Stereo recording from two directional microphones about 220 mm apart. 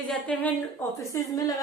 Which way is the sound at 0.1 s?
5° left (ahead or behind).